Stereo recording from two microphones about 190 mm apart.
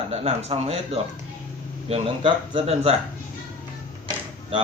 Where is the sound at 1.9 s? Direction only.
30° right (ahead or behind).